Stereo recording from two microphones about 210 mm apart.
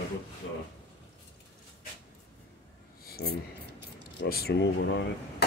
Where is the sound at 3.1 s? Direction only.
45° left (ahead or behind).